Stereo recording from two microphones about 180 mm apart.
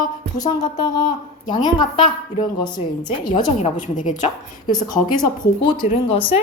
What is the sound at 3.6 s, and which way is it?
Speech, 45° left (ahead or behind).